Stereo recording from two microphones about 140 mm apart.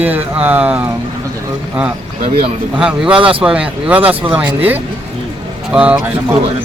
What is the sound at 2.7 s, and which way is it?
A man's voice, 5° right (ahead or behind).